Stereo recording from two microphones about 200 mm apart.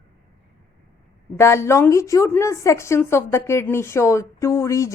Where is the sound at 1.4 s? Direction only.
15° left (ahead or behind).